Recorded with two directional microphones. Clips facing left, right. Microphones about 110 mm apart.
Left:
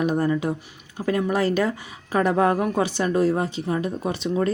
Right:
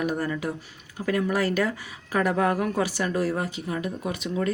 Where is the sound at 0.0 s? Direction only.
25° left (ahead or behind).